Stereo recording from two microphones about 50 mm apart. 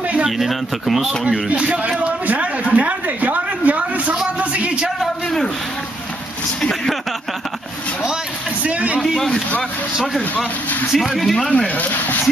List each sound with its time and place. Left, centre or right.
0.4 s speech: centre
1.2 s a man's voice: right
6.6 s speech: centre
8.6 s a man's voice: right
9.0 s speech: centre
10.9 s speech: centre
11.5 s speech: left